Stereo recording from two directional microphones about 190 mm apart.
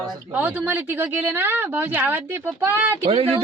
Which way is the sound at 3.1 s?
30° right (ahead or behind).